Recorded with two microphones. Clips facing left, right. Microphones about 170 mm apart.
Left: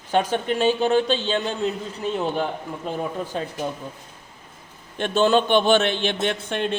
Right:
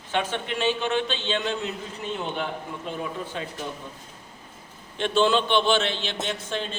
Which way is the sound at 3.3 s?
40° left (ahead or behind).